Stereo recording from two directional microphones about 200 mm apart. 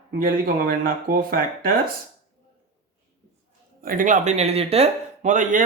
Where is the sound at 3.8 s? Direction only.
40° right (ahead or behind).